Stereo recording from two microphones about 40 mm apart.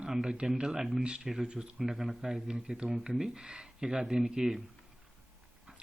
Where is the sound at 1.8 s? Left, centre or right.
Centre.